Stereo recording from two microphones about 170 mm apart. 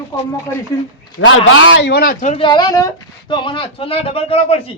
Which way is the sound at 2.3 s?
25° left (ahead or behind).